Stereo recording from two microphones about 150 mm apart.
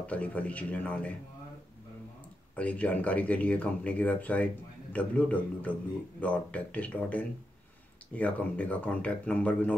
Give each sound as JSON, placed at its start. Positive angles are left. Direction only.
{"t": 0.0, "sound": "speech", "side_deg": 10}
{"t": 2.5, "sound": "speech", "side_deg": 10}